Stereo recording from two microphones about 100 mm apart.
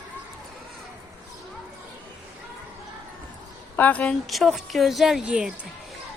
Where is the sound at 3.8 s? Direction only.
15° left (ahead or behind).